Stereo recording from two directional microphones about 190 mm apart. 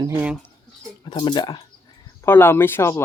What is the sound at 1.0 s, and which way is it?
Speech, 20° left (ahead or behind).